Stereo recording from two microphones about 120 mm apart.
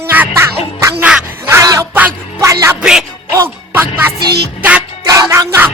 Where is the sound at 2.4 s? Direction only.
25° right (ahead or behind).